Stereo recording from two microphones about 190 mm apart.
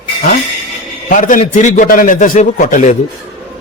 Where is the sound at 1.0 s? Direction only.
45° left (ahead or behind).